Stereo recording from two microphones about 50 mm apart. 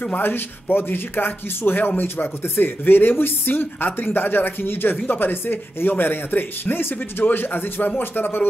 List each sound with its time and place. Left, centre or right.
0.2 s speech: left